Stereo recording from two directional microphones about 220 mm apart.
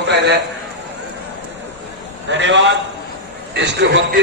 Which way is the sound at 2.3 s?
55° right (ahead or behind).